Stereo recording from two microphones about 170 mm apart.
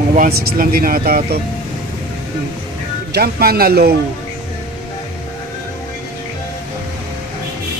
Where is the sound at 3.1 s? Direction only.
65° right (ahead or behind).